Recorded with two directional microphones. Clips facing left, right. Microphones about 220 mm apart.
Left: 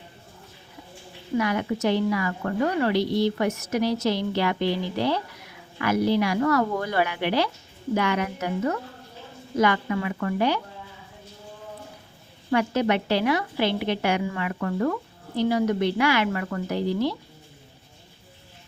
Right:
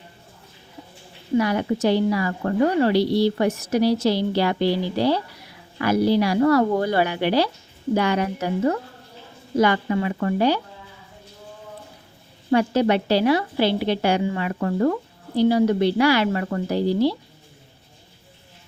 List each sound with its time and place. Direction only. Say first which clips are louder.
1.4 s a woman's voice: right 4 dB; 35° right (ahead or behind)
12.5 s a woman's voice: right 4 dB; 30° right (ahead or behind)